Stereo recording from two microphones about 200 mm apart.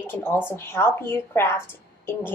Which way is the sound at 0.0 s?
10° left (ahead or behind).